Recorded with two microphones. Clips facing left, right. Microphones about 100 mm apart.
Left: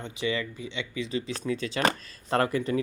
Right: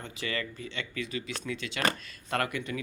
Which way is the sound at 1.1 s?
35° left (ahead or behind).